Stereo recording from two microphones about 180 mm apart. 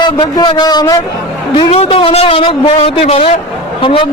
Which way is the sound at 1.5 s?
30° left (ahead or behind).